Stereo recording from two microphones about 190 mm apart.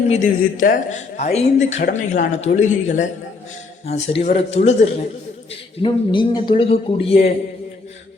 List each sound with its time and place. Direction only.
0.1 s speech: 40° left (ahead or behind)
5.8 s a man's voice: 25° left (ahead or behind)